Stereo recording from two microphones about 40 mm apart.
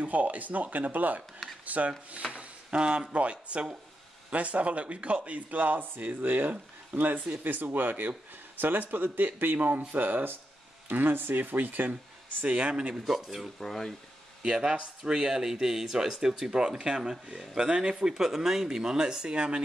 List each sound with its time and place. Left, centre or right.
0.0 s speech: right
1.4 s speech: centre
1.9 s speech: right
7.2 s speech: right
7.4 s speech: right
11.9 s speech: right
12.7 s speech: right
13.0 s speech: centre
13.6 s speech: centre
14.4 s speech: centre